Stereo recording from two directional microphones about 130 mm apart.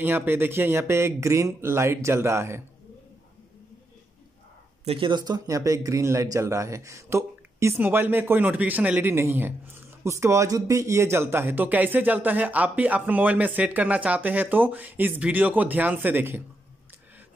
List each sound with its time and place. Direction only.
0.0 s speech: 15° right (ahead or behind)
4.8 s speech: 40° right (ahead or behind); by 16.4 s 15° right (ahead or behind)